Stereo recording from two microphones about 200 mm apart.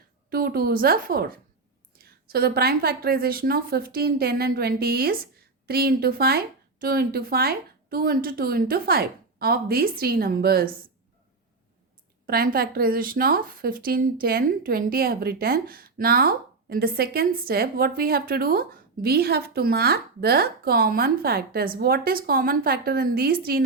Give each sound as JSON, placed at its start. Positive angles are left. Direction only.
{"t": 0.3, "sound": "a woman's voice", "side_deg": -50}
{"t": 12.2, "sound": "a woman's voice", "side_deg": -45}